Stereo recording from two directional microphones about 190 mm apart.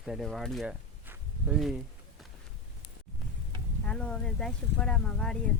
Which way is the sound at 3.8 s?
5° left (ahead or behind).